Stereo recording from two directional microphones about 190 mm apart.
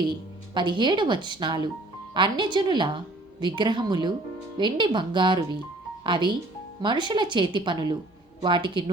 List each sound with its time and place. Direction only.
0.1 s speech: 25° right (ahead or behind)